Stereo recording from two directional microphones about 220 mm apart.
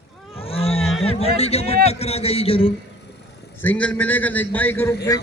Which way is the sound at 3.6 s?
5° left (ahead or behind).